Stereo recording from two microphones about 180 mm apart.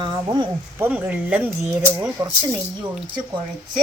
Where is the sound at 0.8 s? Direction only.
10° right (ahead or behind).